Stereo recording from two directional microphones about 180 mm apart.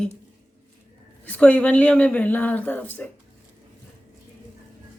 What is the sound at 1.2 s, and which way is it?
Speech, 10° left (ahead or behind).